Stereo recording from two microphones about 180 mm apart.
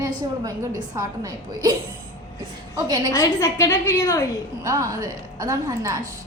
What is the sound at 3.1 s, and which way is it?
A woman's voice, 20° left (ahead or behind).